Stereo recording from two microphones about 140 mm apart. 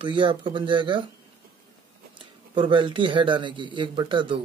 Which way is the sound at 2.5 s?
35° right (ahead or behind).